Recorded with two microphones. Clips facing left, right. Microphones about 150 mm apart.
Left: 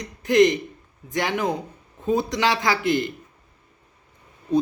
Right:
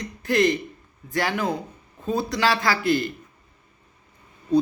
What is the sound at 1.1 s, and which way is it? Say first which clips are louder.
A man's voice: left 1 dB; 20° left (ahead or behind).